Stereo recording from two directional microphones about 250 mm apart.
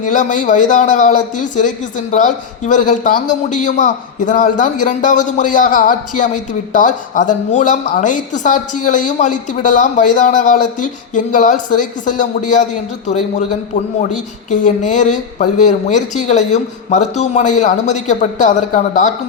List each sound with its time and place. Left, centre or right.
0.0 s a man's voice: left